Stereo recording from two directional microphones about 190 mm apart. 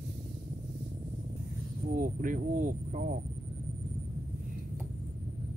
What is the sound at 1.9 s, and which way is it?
Speech, 45° right (ahead or behind).